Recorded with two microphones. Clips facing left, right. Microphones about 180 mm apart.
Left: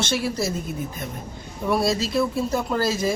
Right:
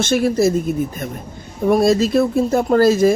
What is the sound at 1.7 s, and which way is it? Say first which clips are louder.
Speech: right 8 dB; 50° right (ahead or behind).